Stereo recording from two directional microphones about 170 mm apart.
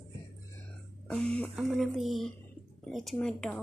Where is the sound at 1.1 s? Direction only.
5° left (ahead or behind).